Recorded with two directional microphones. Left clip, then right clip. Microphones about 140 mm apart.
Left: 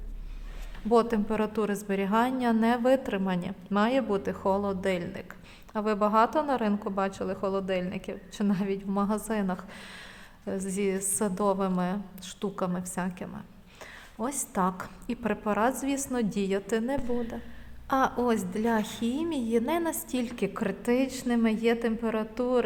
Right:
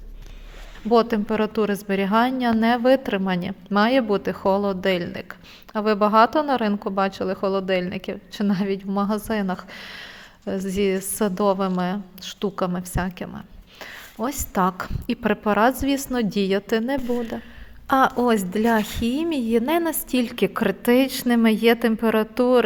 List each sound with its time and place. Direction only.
0.9 s a woman's voice: 25° right (ahead or behind); by 22.6 s 50° right (ahead or behind)